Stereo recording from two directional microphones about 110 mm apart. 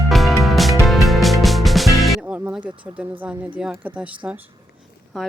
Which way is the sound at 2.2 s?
10° right (ahead or behind).